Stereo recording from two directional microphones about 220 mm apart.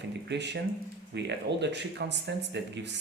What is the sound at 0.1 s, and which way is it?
Speech, 50° right (ahead or behind).